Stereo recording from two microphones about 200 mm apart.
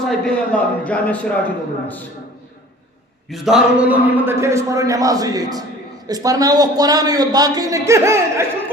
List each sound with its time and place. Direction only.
0.0 s speech: 5° left (ahead or behind)
3.2 s a man's voice: centre (ahead or behind)